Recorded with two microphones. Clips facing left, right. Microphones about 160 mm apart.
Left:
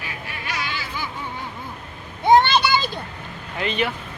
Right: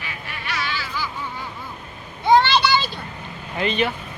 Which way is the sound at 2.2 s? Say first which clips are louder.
Left 1 dB; 20° left (ahead or behind).